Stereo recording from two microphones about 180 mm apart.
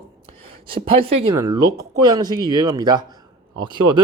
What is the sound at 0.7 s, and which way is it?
Speech, 30° right (ahead or behind).